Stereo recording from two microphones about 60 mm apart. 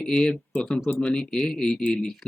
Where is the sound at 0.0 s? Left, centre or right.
Centre.